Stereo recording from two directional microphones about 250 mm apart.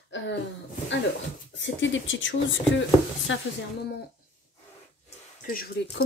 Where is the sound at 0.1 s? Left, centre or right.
Left.